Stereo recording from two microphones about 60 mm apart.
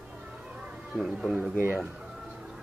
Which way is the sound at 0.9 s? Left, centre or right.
Centre.